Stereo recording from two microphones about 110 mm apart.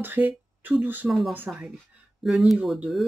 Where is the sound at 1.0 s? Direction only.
Centre (ahead or behind).